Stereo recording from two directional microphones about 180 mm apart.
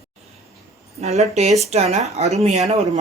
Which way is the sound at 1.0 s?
35° right (ahead or behind).